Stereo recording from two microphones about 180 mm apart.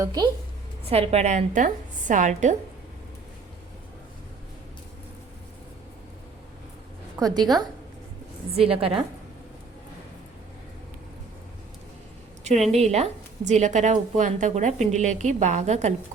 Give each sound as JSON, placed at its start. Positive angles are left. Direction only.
{"t": 0.0, "sound": "a woman's voice", "side_deg": -20}
{"t": 0.9, "sound": "a woman's voice", "side_deg": -35}
{"t": 7.2, "sound": "a woman's voice", "side_deg": -20}
{"t": 8.5, "sound": "a woman's voice", "side_deg": -30}
{"t": 12.7, "sound": "a woman's voice", "side_deg": -35}